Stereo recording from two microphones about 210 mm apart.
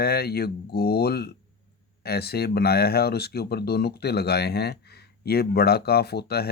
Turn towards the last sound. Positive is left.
turn(degrees=50)  # may be behind; listen again after turning